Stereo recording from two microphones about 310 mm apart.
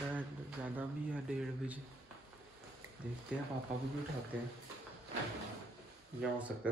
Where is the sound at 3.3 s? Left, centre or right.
Centre.